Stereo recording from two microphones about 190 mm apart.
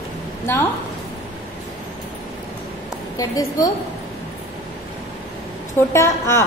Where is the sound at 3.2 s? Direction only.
20° left (ahead or behind).